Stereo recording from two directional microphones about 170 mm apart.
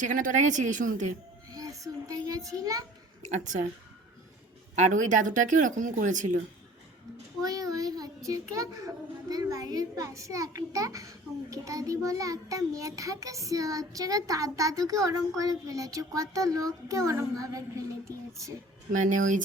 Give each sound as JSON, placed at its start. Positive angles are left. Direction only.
{"t": 0.0, "sound": "speech", "side_deg": -50}
{"t": 1.5, "sound": "a child's voice", "side_deg": -20}
{"t": 3.2, "sound": "speech", "side_deg": -45}
{"t": 4.7, "sound": "speech", "side_deg": -45}
{"t": 7.4, "sound": "child singing", "side_deg": -20}
{"t": 9.3, "sound": "a child's voice", "side_deg": -20}
{"t": 18.9, "sound": "speech", "side_deg": -50}